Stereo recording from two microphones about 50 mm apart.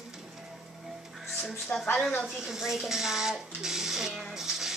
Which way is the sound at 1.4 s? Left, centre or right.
Centre.